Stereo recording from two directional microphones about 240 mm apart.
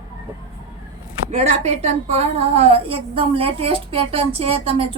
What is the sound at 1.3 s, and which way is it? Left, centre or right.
A woman's voice, right.